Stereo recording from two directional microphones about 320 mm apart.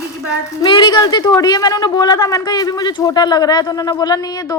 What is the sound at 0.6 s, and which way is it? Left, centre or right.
Speech, centre.